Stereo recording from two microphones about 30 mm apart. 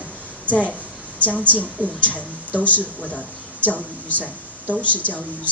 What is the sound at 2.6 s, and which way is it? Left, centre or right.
Speech, left.